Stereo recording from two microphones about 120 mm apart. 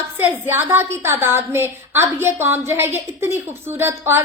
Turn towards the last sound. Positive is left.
turn(degrees=-20)  # may be behind; listen again after turning